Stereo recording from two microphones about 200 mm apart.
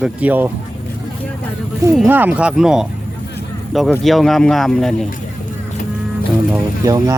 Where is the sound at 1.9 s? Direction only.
5° right (ahead or behind).